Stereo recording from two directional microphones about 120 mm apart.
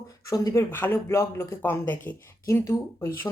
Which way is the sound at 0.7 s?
20° left (ahead or behind).